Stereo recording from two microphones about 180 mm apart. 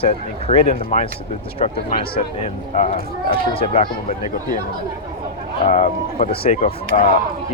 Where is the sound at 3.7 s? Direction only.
50° left (ahead or behind).